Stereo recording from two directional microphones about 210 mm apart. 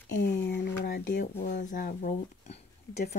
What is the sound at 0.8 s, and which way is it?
Speech, 45° left (ahead or behind).